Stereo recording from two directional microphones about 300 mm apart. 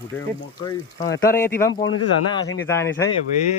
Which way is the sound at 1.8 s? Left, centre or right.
Left.